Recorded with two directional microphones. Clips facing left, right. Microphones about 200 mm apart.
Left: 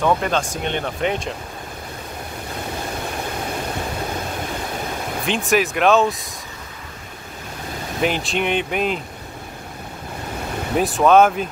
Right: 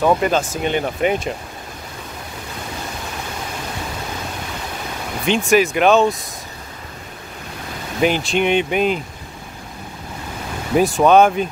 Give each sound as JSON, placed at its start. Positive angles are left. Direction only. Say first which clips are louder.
{"t": 0.0, "sound": "speech", "louder": "right 3 dB", "side_deg": -5}
{"t": 5.2, "sound": "speech", "louder": "right 4 dB", "side_deg": 0}
{"t": 8.0, "sound": "speech", "louder": "right 4 dB", "side_deg": 0}
{"t": 10.7, "sound": "speech", "louder": "right 2 dB", "side_deg": -5}